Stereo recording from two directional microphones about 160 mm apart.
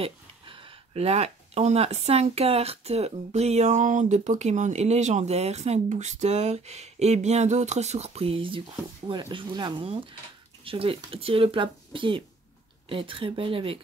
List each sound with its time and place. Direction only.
0.0 s speech: 35° right (ahead or behind)